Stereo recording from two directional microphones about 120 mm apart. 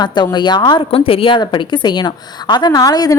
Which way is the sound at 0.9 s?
50° left (ahead or behind).